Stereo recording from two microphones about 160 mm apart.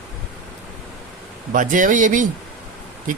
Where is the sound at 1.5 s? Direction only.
55° right (ahead or behind).